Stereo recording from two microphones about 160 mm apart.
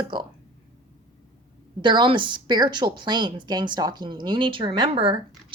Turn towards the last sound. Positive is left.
turn(degrees=-30)  # may be behind; listen again after turning